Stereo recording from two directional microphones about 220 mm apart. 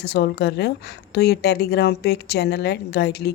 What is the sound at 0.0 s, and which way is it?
A woman's voice, 50° left (ahead or behind).